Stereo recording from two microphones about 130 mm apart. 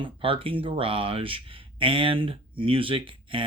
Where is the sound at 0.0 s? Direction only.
45° right (ahead or behind).